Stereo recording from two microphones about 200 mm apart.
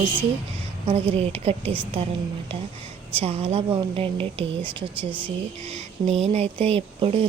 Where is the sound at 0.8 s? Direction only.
30° right (ahead or behind).